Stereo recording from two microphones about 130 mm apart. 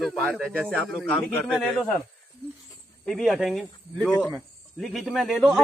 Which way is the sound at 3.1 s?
Centre (ahead or behind).